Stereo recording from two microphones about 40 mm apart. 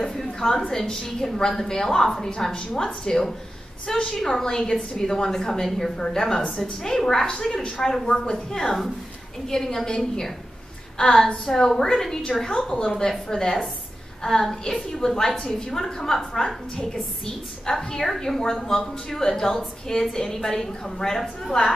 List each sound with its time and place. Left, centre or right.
0.0 s a woman's voice: centre
7.8 s a woman's voice: centre
13.3 s a woman's voice: centre
17.6 s a woman's voice: centre